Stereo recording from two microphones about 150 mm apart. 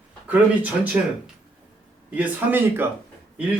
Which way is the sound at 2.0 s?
10° right (ahead or behind).